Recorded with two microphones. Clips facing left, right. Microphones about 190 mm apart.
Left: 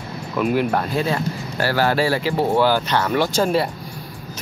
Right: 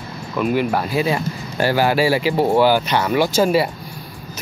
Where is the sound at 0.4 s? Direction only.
Centre (ahead or behind).